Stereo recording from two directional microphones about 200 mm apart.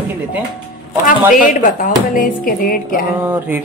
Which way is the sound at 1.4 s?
40° left (ahead or behind).